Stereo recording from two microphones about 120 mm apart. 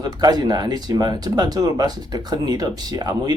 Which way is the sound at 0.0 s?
35° right (ahead or behind).